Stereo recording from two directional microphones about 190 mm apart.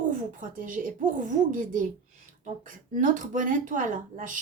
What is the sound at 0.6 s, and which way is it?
A woman's voice, 45° right (ahead or behind).